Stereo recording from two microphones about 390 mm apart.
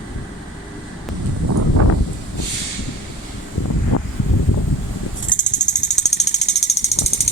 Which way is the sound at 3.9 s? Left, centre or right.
Left.